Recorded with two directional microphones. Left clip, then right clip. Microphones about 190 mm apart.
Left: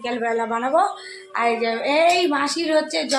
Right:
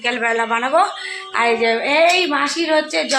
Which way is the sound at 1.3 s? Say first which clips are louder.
Right 5 dB; 30° right (ahead or behind).